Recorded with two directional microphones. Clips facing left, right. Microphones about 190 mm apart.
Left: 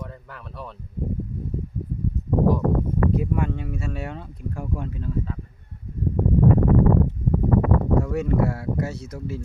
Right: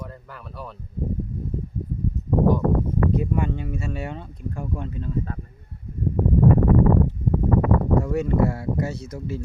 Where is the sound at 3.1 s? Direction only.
Centre (ahead or behind).